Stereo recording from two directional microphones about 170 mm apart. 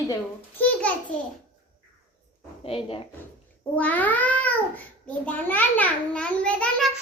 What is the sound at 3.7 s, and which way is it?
A child's voice, 10° left (ahead or behind).